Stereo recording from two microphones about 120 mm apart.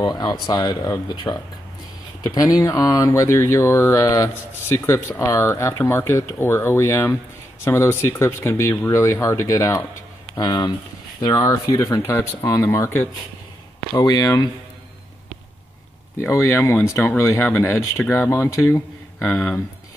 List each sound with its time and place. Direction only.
0.0 s speech: 35° left (ahead or behind)
13.9 s speech: 30° left (ahead or behind)
16.2 s speech: 25° left (ahead or behind)